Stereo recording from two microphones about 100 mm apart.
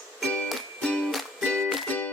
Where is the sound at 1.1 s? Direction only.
Centre (ahead or behind); by 2.1 s 15° left (ahead or behind).